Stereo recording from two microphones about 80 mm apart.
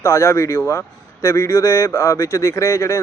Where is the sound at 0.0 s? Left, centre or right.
Left.